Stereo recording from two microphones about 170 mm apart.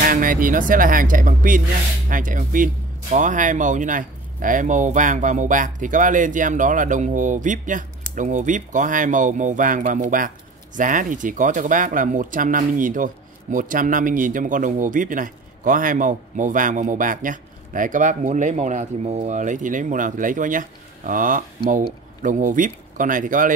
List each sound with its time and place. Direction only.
0.0 s speech: 55° right (ahead or behind)